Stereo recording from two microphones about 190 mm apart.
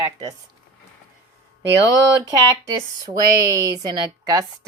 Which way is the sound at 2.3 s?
20° right (ahead or behind).